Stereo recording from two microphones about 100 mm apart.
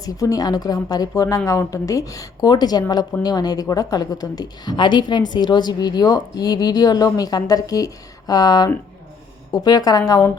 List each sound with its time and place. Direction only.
0.0 s a woman's voice: 35° left (ahead or behind)